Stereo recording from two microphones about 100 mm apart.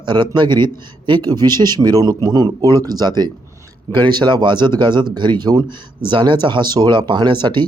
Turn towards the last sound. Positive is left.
turn(degrees=-50)  # may be behind; listen again after turning